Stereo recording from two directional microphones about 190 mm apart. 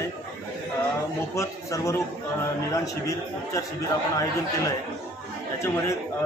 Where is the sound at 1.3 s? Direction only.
15° left (ahead or behind).